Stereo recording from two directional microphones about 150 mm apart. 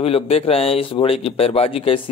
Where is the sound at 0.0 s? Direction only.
40° left (ahead or behind).